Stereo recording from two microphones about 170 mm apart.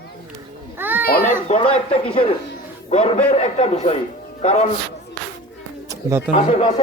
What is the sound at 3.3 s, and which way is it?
A man's voice, 40° left (ahead or behind).